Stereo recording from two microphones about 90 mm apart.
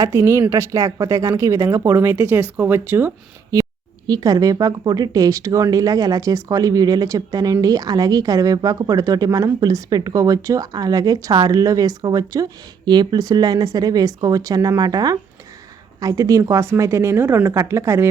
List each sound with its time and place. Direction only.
0.0 s speech: 35° right (ahead or behind)
3.5 s speech: 45° right (ahead or behind)